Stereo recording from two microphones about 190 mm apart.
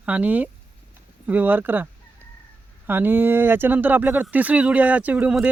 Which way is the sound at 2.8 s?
10° right (ahead or behind).